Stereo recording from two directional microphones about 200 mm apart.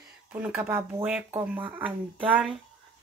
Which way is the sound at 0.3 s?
5° right (ahead or behind).